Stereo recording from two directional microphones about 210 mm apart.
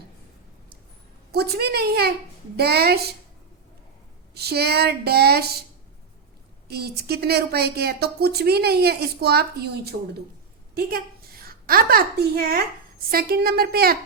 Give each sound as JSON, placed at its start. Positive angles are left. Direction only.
{"t": 1.3, "sound": "speech", "side_deg": -50}
{"t": 4.4, "sound": "speech", "side_deg": -50}
{"t": 6.7, "sound": "a woman's voice", "side_deg": -50}